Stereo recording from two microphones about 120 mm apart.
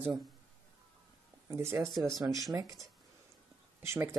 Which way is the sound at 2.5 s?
30° right (ahead or behind).